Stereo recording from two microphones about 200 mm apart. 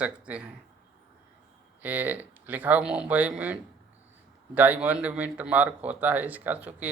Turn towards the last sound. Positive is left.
turn(degrees=-10)  # may be behind; listen again after turning